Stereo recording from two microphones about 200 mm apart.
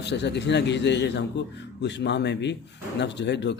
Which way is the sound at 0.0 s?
60° left (ahead or behind).